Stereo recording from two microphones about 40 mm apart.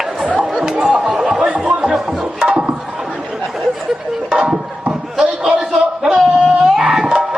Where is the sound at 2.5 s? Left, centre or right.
Right.